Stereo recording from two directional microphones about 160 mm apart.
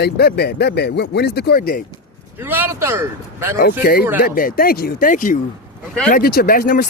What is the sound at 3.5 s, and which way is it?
Speech, 70° left (ahead or behind).